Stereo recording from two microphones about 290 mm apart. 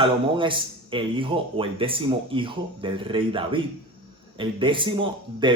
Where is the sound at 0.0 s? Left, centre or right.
Centre.